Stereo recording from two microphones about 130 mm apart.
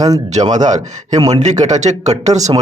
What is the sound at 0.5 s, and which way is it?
A man's voice, 70° right (ahead or behind).